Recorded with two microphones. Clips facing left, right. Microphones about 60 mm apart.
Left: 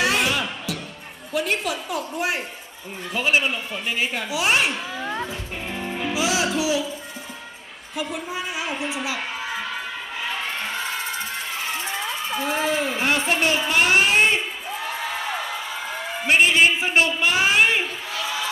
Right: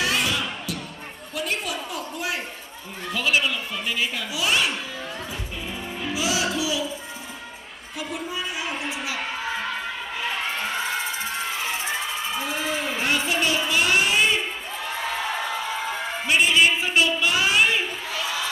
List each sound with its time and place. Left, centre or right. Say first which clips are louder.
0.0 s music: left 3 dB; left
1.3 s a woman's voice: left 4 dB; left
1.9 s speech: left 4 dB; left
5.7 s music: left 4 dB; left
6.1 s music: left 2 dB; left
6.6 s speech: left 3 dB; left
8.0 s speech: left 2 dB; left
10.8 s crowd: right 1 dB; right
12.4 s speech: left 7 dB; left
13.3 s a woman's voice: left 2 dB; left
13.7 s child singing: left 4 dB; left
16.3 s a sound: left 2 dB; left